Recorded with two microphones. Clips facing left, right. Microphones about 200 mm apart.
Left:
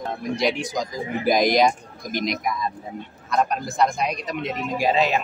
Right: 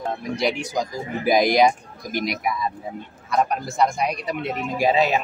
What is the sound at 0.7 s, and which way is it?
A man's voice, 5° right (ahead or behind).